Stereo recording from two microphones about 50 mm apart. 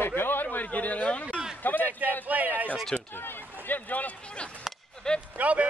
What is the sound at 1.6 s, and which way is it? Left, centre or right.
Speech, left.